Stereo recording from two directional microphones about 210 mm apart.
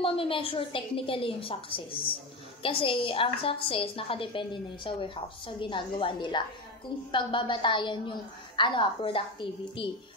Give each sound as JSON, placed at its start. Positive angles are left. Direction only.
{"t": 0.0, "sound": "a woman's voice", "side_deg": 25}